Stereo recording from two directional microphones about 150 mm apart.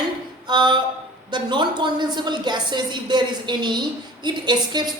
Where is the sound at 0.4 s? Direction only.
30° right (ahead or behind).